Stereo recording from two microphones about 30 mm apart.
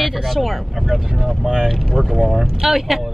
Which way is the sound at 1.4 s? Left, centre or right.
Right.